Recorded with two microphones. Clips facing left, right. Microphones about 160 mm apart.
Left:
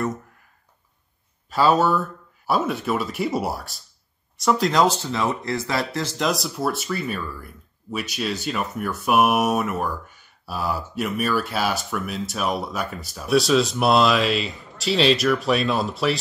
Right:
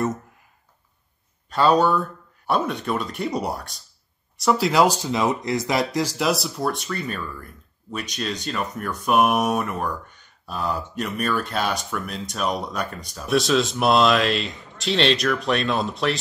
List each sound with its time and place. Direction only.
1.5 s speech: 5° left (ahead or behind)